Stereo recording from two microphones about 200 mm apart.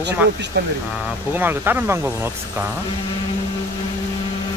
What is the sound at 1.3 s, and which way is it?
Speech, 10° right (ahead or behind).